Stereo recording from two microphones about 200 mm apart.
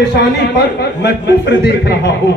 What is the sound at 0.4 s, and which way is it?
Speech, 55° left (ahead or behind).